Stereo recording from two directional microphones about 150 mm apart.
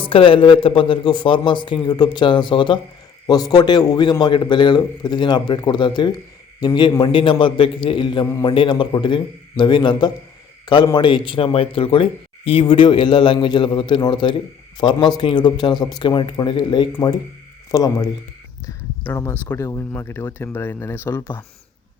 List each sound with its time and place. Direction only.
0.0 s a man's voice: 35° left (ahead or behind); by 21.4 s 15° left (ahead or behind)